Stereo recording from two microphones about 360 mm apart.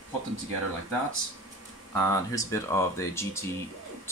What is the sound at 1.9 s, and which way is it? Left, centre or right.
Speech, centre.